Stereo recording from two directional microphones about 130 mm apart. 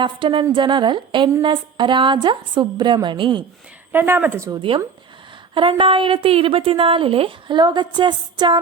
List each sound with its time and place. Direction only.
0.0 s a woman's voice: 40° right (ahead or behind)
3.9 s speech: 15° right (ahead or behind)
5.5 s a woman's voice: 40° right (ahead or behind)